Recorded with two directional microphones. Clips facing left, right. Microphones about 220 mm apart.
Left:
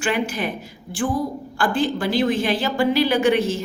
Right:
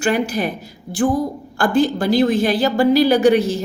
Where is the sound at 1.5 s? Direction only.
45° right (ahead or behind).